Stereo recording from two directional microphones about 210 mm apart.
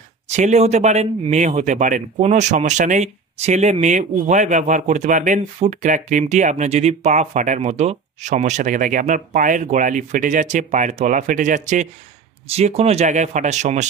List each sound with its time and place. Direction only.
0.3 s a man's voice: 30° right (ahead or behind)